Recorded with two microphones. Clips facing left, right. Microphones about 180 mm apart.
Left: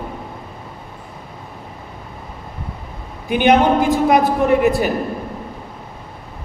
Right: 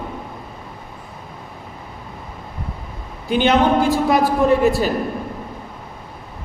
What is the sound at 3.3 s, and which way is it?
A woman's voice, 15° left (ahead or behind).